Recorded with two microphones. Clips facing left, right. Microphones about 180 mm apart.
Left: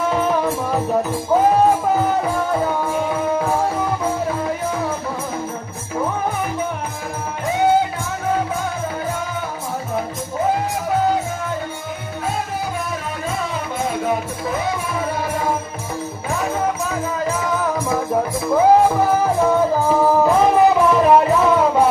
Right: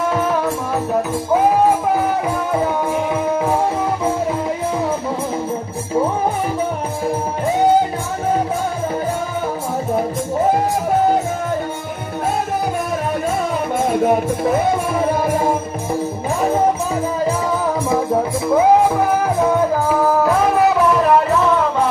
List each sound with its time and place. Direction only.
2.6 s music: 10° right (ahead or behind)
13.8 s music: 55° right (ahead or behind)
18.5 s music: 10° right (ahead or behind)
20.0 s music: 10° left (ahead or behind)